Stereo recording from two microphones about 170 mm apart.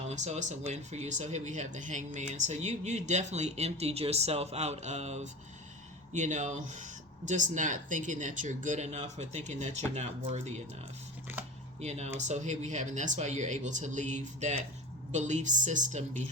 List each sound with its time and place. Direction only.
0.1 s speech: 40° right (ahead or behind)
11.8 s speech: 40° right (ahead or behind)